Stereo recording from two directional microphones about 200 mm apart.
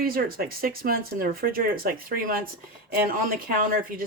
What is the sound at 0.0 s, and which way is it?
Speech, 45° right (ahead or behind).